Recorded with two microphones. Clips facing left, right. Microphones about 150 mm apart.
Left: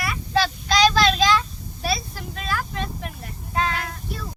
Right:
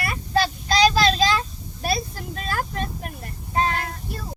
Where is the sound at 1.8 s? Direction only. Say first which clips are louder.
Right 1 dB; 45° right (ahead or behind).